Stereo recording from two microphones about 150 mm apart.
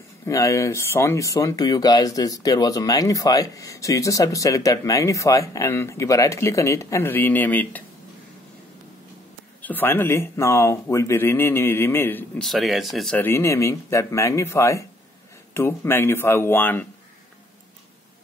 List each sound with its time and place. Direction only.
0.2 s speech: 20° left (ahead or behind)
9.6 s speech: 10° left (ahead or behind)
12.4 s speech: centre (ahead or behind)
13.2 s speech: 15° left (ahead or behind)